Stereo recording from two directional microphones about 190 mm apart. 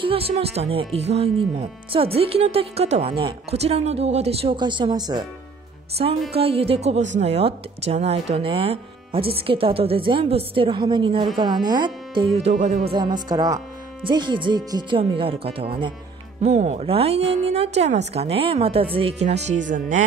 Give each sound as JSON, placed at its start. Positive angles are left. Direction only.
{"t": 0.0, "sound": "speech", "side_deg": -30}
{"t": 6.3, "sound": "a woman's voice", "side_deg": -30}
{"t": 12.4, "sound": "speech", "side_deg": -35}
{"t": 12.9, "sound": "a woman's voice", "side_deg": -20}